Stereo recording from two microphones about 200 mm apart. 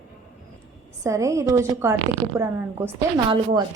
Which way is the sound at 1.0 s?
15° right (ahead or behind).